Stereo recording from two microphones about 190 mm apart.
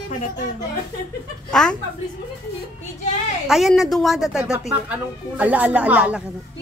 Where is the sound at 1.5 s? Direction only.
5° left (ahead or behind).